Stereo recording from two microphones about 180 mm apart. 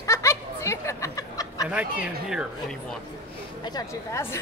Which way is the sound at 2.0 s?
5° right (ahead or behind).